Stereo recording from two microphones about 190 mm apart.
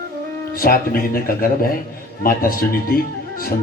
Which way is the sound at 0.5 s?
50° left (ahead or behind).